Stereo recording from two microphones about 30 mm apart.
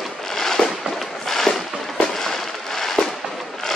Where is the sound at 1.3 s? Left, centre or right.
Centre.